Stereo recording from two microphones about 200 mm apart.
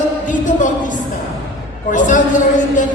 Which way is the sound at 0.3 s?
40° left (ahead or behind).